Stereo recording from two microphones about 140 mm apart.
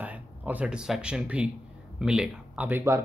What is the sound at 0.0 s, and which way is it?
Speech, 10° right (ahead or behind).